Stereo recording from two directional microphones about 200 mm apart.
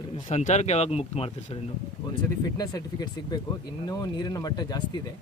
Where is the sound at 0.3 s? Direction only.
35° left (ahead or behind).